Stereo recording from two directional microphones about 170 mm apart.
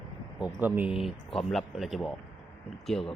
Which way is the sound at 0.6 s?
5° right (ahead or behind).